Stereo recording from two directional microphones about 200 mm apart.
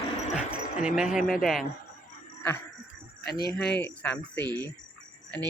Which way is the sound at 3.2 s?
50° left (ahead or behind).